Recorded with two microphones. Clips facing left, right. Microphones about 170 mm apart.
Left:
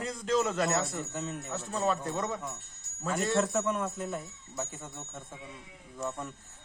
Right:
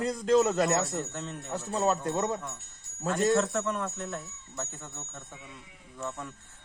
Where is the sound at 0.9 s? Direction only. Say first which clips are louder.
Right 1 dB; 5° left (ahead or behind).